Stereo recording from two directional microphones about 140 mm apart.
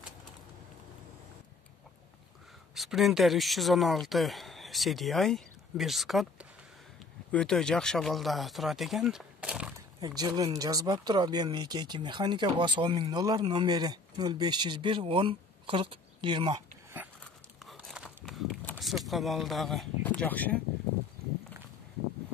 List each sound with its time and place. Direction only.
2.7 s speech: centre (ahead or behind)
7.2 s speech: 5° left (ahead or behind)
9.9 s speech: 30° right (ahead or behind)
17.6 s a sound: centre (ahead or behind)
18.8 s speech: centre (ahead or behind)